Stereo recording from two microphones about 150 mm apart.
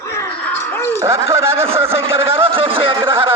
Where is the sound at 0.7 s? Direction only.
15° left (ahead or behind).